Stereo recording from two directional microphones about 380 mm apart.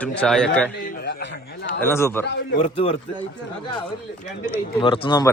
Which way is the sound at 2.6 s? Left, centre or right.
Centre.